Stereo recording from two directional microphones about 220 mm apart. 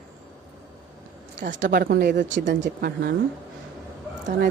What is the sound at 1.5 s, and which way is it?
Speech, 50° right (ahead or behind).